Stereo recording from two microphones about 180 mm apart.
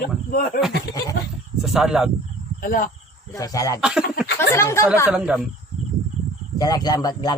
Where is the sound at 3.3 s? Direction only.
20° left (ahead or behind).